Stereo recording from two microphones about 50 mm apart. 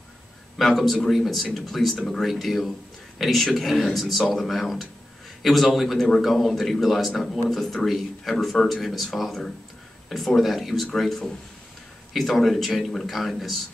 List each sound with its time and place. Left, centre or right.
0.6 s speech: centre